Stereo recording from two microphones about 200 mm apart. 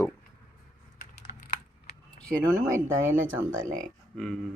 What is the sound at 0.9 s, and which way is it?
Computer keyboard, 40° left (ahead or behind).